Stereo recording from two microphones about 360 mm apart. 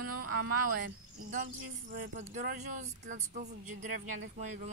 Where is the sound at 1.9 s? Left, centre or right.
Right.